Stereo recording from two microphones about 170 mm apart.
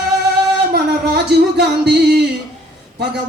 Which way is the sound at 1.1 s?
75° right (ahead or behind).